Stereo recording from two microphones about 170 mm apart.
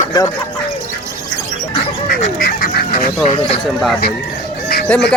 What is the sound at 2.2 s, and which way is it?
Duck, 60° left (ahead or behind).